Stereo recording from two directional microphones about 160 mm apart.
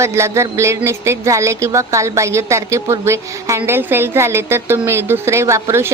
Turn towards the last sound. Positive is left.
turn(degrees=-15)  # may be behind; listen again after turning